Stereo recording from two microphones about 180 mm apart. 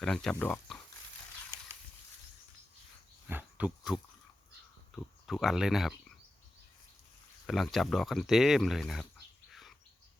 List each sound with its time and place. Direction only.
0.0 s speech: 5° left (ahead or behind)
3.2 s a sound: 10° right (ahead or behind)
5.2 s speech: centre (ahead or behind)
7.4 s speech: centre (ahead or behind)
9.5 s bird: centre (ahead or behind)